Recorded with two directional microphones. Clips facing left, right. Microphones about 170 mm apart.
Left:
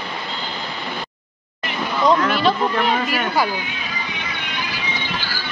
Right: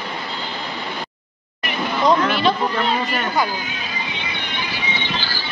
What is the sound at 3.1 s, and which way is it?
Speech, 5° left (ahead or behind).